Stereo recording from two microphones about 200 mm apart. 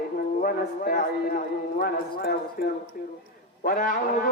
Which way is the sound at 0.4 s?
45° left (ahead or behind).